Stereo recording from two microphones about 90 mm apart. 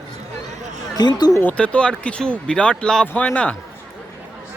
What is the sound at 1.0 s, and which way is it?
Speech, 50° left (ahead or behind).